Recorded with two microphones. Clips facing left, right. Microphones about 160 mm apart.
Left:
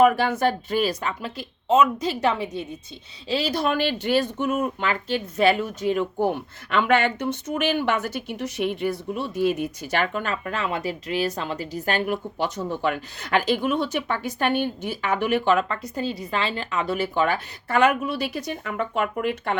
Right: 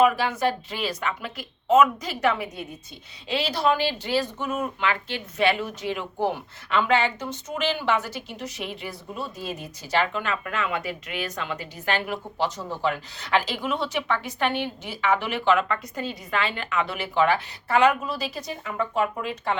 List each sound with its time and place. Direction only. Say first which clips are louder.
0.0 s speech: left 3 dB; 50° left (ahead or behind); by 2.6 s 25° left (ahead or behind)
3.2 s speech: even; 40° left (ahead or behind)
6.7 s speech: left 2 dB; 55° left (ahead or behind)
10.4 s speech: left 2 dB; 35° left (ahead or behind)
12.0 s speech: left 2 dB; 55° left (ahead or behind)